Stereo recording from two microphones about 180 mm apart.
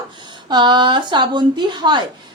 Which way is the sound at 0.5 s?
25° right (ahead or behind).